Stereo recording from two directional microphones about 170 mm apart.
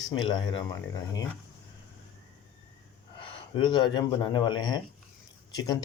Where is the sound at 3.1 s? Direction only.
30° left (ahead or behind).